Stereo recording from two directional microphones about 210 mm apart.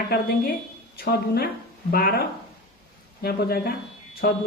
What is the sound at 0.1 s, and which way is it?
A woman's voice, 45° left (ahead or behind).